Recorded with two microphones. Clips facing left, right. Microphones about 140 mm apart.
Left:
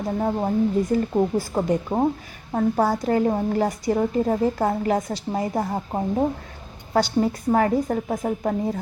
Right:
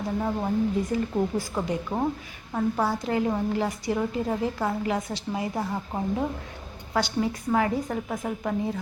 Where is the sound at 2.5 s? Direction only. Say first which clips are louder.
Left 5 dB; 40° left (ahead or behind).